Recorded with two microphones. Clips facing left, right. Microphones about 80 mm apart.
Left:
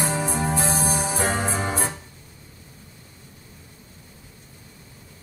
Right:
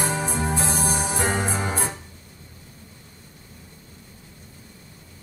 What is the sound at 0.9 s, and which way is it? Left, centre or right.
Music, right.